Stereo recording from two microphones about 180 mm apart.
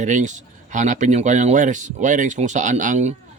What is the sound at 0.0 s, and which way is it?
Speech, 40° right (ahead or behind).